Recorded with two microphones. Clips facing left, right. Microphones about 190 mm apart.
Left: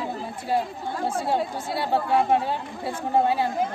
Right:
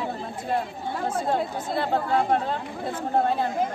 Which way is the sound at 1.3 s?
10° left (ahead or behind).